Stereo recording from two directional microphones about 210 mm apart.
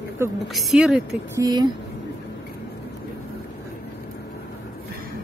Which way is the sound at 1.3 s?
20° right (ahead or behind).